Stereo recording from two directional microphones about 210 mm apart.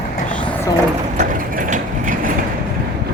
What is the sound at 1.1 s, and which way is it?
Mechanisms, 40° right (ahead or behind).